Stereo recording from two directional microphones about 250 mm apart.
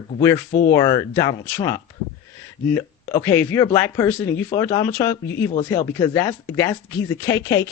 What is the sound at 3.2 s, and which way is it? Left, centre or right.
Speech, centre.